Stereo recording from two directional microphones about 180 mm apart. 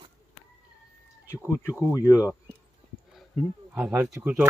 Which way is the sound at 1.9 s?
15° left (ahead or behind).